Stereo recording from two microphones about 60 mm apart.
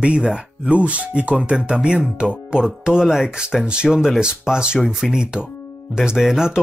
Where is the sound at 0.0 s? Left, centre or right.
Centre.